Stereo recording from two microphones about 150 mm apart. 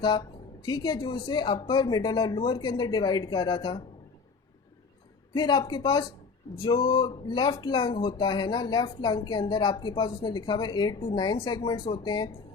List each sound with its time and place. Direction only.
0.0 s speech: 30° left (ahead or behind)
5.3 s speech: 30° left (ahead or behind)